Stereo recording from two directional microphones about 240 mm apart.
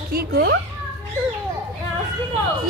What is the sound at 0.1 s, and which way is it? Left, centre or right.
Speech, right.